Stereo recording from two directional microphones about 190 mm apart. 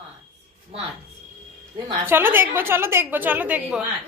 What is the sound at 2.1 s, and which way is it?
A woman's voice, 10° right (ahead or behind).